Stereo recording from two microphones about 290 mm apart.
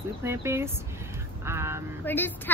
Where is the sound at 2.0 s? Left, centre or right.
Centre.